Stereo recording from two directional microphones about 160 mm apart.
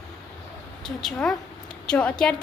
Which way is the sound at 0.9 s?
Centre (ahead or behind).